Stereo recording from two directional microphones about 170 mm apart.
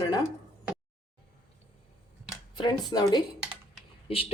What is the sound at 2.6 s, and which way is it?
Speech, 25° left (ahead or behind).